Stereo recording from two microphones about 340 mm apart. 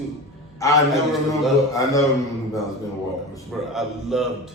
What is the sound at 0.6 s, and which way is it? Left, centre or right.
A man's voice, centre.